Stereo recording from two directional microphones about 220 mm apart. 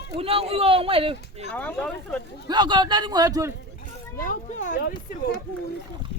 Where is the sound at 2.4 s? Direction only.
20° right (ahead or behind).